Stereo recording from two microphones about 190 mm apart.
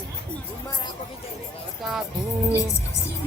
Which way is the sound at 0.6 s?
20° left (ahead or behind).